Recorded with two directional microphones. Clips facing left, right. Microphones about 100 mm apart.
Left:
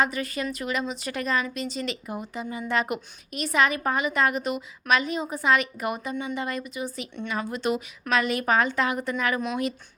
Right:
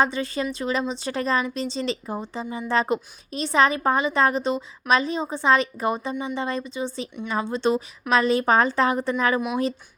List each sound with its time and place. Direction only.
0.0 s speech: 30° right (ahead or behind)